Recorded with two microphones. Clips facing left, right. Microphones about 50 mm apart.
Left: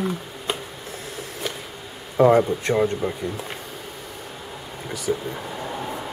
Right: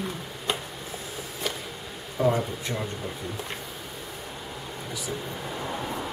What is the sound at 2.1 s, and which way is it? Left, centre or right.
Speech, left.